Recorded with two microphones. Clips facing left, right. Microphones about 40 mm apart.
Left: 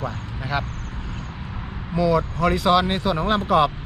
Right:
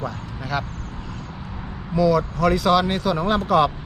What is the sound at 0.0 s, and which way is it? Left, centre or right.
Vehicle, left.